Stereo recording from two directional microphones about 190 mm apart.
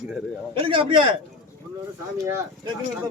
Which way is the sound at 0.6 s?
25° right (ahead or behind).